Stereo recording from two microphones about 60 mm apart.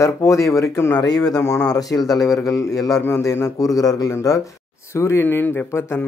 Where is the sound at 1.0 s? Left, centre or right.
Left.